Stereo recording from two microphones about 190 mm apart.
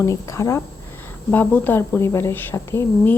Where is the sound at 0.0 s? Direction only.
15° left (ahead or behind).